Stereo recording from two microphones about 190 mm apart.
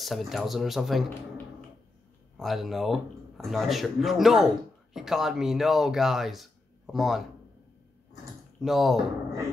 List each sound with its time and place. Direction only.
0.0 s speech: centre (ahead or behind)
2.3 s speech: centre (ahead or behind)
8.5 s speech: centre (ahead or behind)